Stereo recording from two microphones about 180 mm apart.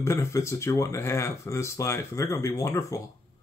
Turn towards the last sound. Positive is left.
turn(degrees=15)  # may be behind; listen again after turning